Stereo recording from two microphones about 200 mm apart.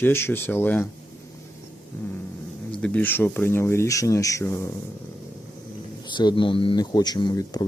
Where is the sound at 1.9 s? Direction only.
10° left (ahead or behind).